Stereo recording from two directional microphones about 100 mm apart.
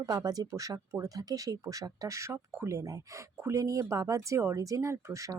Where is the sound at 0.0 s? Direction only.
35° right (ahead or behind).